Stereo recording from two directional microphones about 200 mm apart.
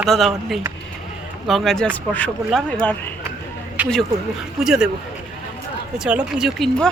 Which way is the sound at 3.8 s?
10° right (ahead or behind).